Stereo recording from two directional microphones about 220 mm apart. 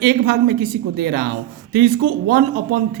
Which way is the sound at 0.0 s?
45° right (ahead or behind).